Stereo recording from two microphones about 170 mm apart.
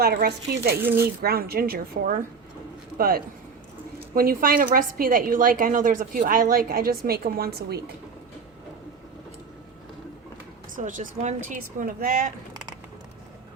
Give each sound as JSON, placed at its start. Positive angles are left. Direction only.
{"t": 0.0, "sound": "speech", "side_deg": -70}
{"t": 0.8, "sound": "speech", "side_deg": -10}
{"t": 1.2, "sound": "a woman's voice", "side_deg": -65}
{"t": 10.8, "sound": "a woman's voice", "side_deg": -50}